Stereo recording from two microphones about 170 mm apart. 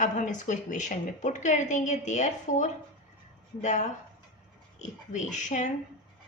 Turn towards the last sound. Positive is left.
turn(degrees=45)  # may be behind; listen again after turning